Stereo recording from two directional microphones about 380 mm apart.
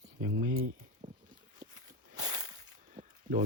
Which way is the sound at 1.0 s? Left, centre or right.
Centre.